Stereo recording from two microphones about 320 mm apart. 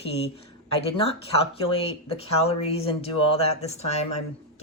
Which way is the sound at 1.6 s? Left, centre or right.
Centre.